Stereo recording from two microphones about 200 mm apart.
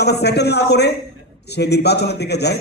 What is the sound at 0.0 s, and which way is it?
A man's voice, 55° left (ahead or behind).